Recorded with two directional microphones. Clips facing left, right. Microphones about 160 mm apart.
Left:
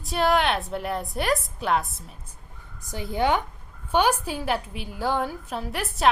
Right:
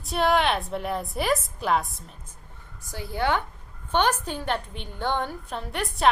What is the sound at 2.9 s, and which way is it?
A woman's voice, 20° left (ahead or behind).